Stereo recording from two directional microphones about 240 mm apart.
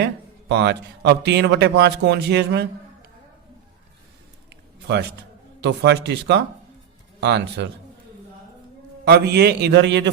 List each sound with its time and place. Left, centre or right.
0.0 s a man's voice: right
4.4 s a sound: right
5.5 s a man's voice: right
9.0 s a man's voice: right